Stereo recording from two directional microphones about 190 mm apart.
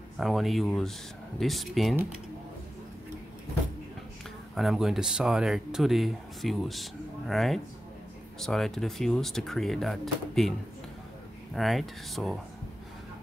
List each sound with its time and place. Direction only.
0.2 s speech: centre (ahead or behind)
4.6 s speech: centre (ahead or behind)
11.5 s speech: centre (ahead or behind)